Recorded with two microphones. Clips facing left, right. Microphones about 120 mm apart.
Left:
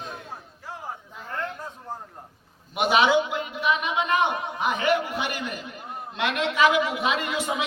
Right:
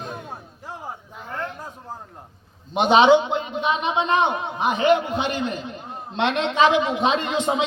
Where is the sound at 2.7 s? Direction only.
25° right (ahead or behind).